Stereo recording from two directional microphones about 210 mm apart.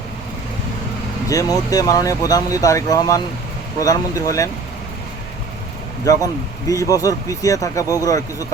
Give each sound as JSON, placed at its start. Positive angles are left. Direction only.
{"t": 1.3, "sound": "speech", "side_deg": 15}
{"t": 6.1, "sound": "speech", "side_deg": 15}